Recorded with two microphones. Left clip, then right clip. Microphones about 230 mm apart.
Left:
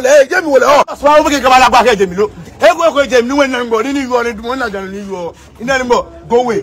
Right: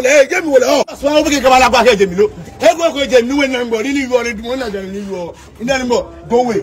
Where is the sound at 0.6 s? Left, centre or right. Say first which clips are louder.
Left 5 dB; centre.